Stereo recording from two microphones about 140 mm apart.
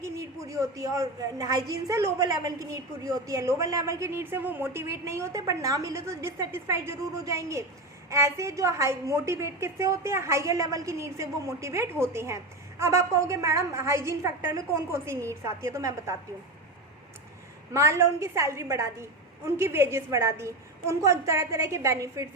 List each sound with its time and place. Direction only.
0.0 s a woman's voice: 20° right (ahead or behind)
17.7 s a woman's voice: 20° right (ahead or behind)